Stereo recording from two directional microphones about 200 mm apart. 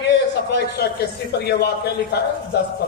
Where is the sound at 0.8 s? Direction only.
55° left (ahead or behind).